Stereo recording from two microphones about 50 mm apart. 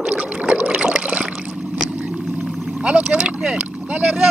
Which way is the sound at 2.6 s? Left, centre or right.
Centre.